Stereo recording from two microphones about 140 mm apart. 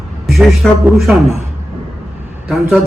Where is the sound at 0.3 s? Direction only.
Centre (ahead or behind).